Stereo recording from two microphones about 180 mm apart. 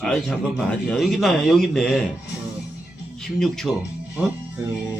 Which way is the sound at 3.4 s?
Centre (ahead or behind).